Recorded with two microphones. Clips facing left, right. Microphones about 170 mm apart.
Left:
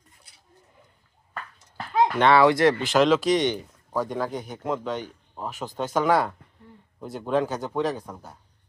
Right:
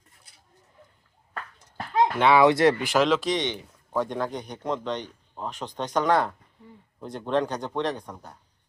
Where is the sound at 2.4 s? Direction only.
20° right (ahead or behind).